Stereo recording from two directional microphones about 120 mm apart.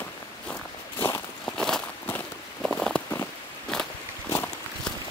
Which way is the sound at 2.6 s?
10° left (ahead or behind).